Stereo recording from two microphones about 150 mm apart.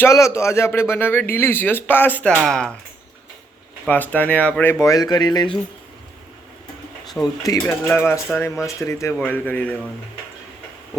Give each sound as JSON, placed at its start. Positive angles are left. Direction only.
{"t": 0.0, "sound": "speech", "side_deg": 20}
{"t": 2.3, "sound": "speech", "side_deg": 0}
{"t": 3.8, "sound": "speech", "side_deg": 10}
{"t": 7.4, "sound": "speech", "side_deg": 25}